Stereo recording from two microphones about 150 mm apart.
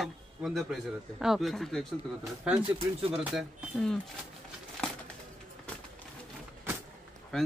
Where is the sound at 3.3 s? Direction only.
5° left (ahead or behind).